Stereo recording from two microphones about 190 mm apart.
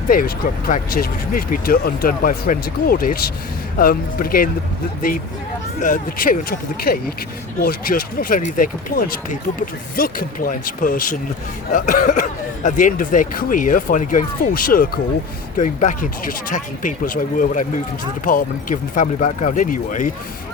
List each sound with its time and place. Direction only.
0.1 s speech: 50° left (ahead or behind)
5.8 s speech: 45° left (ahead or behind)